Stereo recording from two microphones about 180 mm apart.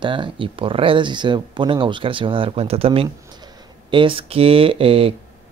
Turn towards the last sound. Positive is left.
turn(degrees=-30)  # may be behind; listen again after turning